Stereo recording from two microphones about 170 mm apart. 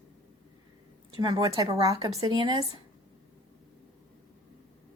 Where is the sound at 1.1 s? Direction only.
25° right (ahead or behind).